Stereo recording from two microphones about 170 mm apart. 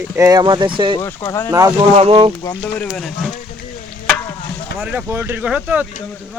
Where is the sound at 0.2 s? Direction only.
20° right (ahead or behind).